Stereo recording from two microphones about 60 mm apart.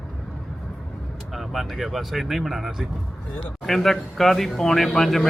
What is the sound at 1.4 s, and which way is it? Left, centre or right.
A man's voice, centre.